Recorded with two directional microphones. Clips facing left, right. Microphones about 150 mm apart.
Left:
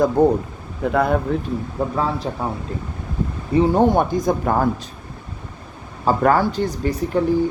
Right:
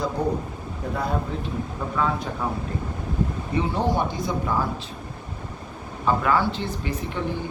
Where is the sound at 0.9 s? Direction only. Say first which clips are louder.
Left 9 dB; 65° left (ahead or behind).